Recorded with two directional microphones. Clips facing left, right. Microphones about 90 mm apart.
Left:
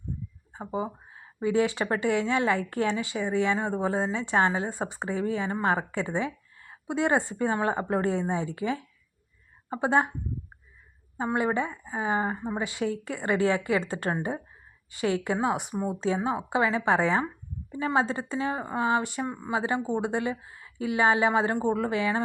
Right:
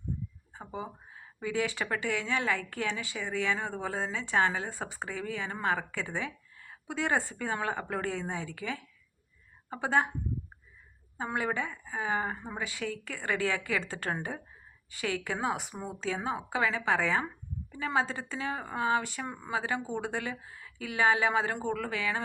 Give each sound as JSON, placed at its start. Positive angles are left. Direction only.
{"t": 0.5, "sound": "a sound", "side_deg": 30}
{"t": 1.5, "sound": "a woman's voice", "side_deg": 25}
{"t": 11.2, "sound": "a woman's voice", "side_deg": 25}